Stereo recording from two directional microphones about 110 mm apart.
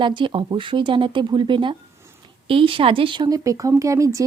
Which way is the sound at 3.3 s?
30° right (ahead or behind).